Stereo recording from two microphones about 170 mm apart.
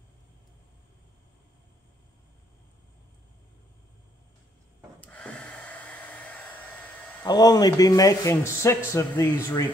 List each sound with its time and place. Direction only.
5.0 s hair dryer: 5° left (ahead or behind)
7.2 s a man's voice: 25° left (ahead or behind)